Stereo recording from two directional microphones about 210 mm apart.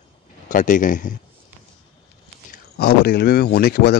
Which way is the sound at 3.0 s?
45° left (ahead or behind).